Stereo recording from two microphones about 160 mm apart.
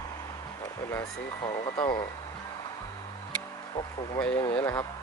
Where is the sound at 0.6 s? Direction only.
20° left (ahead or behind).